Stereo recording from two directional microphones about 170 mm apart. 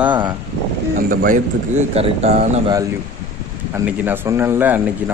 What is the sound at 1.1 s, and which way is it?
Speech, 50° right (ahead or behind).